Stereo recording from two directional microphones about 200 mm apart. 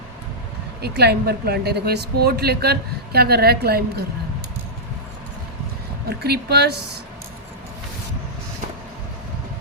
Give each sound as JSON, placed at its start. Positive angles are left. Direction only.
{"t": 0.8, "sound": "speech", "side_deg": -55}
{"t": 6.1, "sound": "speech", "side_deg": -55}